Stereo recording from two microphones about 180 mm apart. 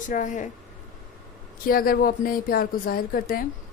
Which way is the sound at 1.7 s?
55° left (ahead or behind).